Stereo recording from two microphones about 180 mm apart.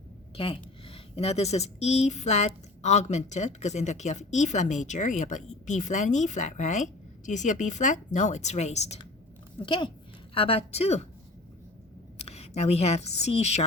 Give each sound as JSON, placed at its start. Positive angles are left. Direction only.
{"t": 0.3, "sound": "speech", "side_deg": 30}
{"t": 12.2, "sound": "a woman's voice", "side_deg": 35}